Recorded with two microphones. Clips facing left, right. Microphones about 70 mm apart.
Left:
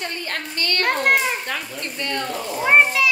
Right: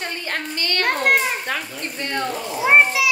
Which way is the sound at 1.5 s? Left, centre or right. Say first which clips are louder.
Right 1 dB; right.